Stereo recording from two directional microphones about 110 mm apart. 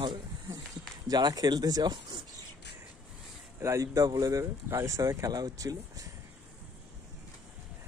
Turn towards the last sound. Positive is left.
turn(degrees=-30)  # may be behind; listen again after turning